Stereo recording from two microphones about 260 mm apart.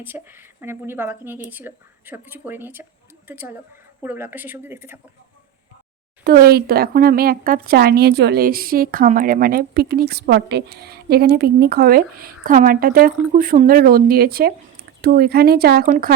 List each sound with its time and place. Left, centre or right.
0.0 s speech: centre
6.2 s speech: right